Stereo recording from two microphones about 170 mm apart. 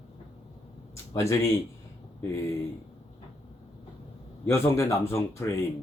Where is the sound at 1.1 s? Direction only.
15° left (ahead or behind).